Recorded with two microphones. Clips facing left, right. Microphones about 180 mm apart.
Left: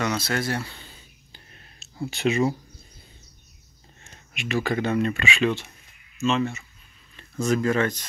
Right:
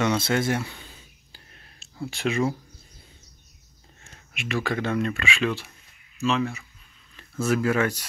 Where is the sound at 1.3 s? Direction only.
5° right (ahead or behind).